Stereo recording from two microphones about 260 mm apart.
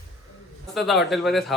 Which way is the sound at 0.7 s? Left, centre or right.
Centre.